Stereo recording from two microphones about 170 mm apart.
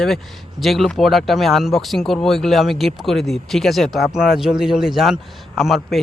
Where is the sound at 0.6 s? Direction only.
Centre (ahead or behind).